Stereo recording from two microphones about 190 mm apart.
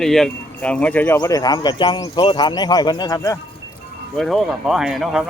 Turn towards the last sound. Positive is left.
turn(degrees=0)  # may be behind; listen again after turning